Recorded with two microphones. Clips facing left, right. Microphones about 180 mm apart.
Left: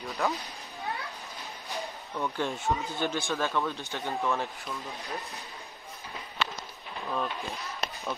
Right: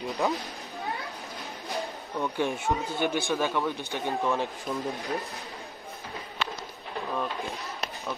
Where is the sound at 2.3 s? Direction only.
15° right (ahead or behind).